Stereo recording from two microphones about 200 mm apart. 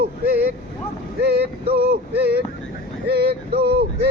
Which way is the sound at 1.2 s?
55° right (ahead or behind).